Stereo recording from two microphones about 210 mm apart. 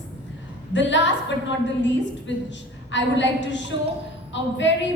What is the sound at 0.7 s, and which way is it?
A woman's voice, 60° left (ahead or behind).